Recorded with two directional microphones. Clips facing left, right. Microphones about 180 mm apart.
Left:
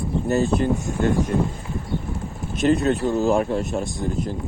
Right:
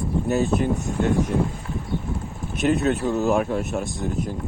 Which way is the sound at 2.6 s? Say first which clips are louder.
Left 2 dB; centre (ahead or behind).